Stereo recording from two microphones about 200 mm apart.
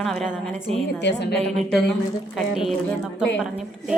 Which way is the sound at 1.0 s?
60° left (ahead or behind).